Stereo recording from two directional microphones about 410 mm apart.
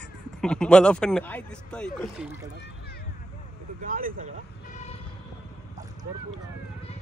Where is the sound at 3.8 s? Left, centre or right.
Centre.